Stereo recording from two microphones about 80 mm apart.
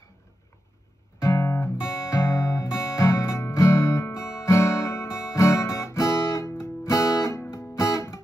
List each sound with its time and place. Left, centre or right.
1.2 s guitar: left
2.8 s music: left